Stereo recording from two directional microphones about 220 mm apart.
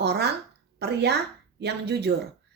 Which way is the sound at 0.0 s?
50° right (ahead or behind).